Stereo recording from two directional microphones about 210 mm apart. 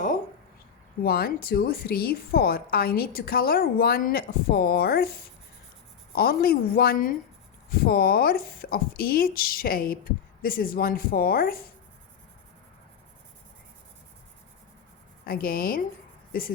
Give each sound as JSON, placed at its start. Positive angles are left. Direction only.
{"t": 1.0, "sound": "a woman's voice", "side_deg": 45}
{"t": 6.1, "sound": "a woman's voice", "side_deg": 45}
{"t": 15.3, "sound": "a woman's voice", "side_deg": 45}